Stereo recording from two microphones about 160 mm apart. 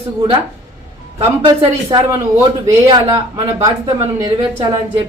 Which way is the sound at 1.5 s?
30° right (ahead or behind).